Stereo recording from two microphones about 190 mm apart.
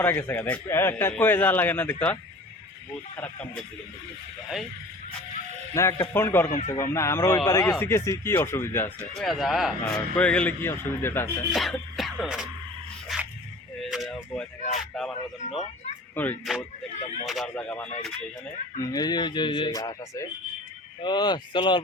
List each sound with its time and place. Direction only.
0.0 s a man's voice: 10° left (ahead or behind)
3.2 s a man's voice: 10° left (ahead or behind)
5.7 s a man's voice: 15° left (ahead or behind)
11.5 s music: centre (ahead or behind)
13.1 s a sound: centre (ahead or behind)
13.8 s speech: centre (ahead or behind)
16.1 s a man's voice: 10° left (ahead or behind)
18.8 s speech: 20° left (ahead or behind)